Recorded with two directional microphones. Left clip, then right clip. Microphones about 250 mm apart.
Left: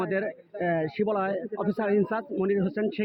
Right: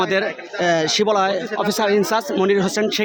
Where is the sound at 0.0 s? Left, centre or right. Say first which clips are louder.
Right 9 dB; centre.